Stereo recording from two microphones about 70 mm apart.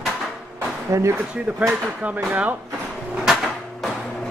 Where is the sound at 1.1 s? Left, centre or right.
Right.